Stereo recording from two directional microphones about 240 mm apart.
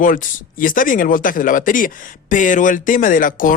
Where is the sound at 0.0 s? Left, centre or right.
Left.